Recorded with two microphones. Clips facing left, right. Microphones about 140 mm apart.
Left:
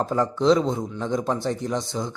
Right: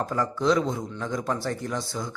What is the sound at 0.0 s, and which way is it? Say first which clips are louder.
A man's voice: left 4 dB; 20° left (ahead or behind).